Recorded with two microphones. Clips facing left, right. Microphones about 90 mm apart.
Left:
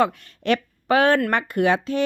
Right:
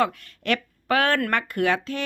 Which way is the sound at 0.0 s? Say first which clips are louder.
Left 3 dB; 20° left (ahead or behind).